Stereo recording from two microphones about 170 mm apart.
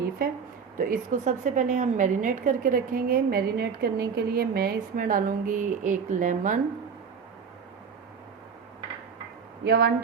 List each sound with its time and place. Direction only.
0.8 s a woman's voice: 50° right (ahead or behind)
9.6 s speech: 75° right (ahead or behind)